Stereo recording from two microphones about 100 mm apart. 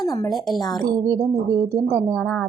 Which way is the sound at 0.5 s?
40° left (ahead or behind).